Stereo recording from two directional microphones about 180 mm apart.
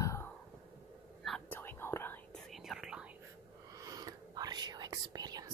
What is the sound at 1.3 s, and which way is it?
Whispering, 5° left (ahead or behind).